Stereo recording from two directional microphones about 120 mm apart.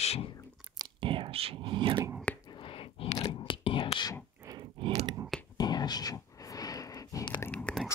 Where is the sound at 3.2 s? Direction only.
45° left (ahead or behind).